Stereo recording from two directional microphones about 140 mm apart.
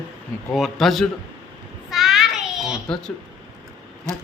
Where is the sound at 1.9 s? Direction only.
Centre (ahead or behind).